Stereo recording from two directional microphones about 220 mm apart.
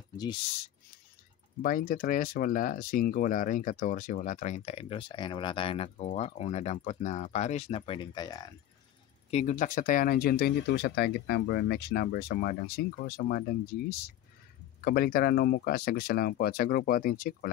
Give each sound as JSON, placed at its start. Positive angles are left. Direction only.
{"t": 1.6, "sound": "speech", "side_deg": 40}
{"t": 9.3, "sound": "speech", "side_deg": 30}